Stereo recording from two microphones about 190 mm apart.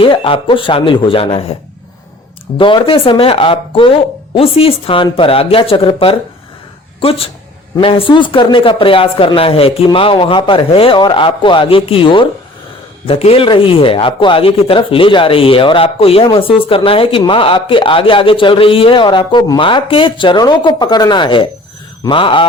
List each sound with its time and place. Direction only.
0.0 s speech: 30° left (ahead or behind)
2.6 s speech: 25° left (ahead or behind)